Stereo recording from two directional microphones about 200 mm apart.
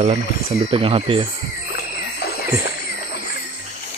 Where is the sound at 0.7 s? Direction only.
25° right (ahead or behind).